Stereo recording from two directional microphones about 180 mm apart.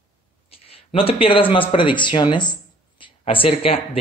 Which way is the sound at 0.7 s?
30° left (ahead or behind).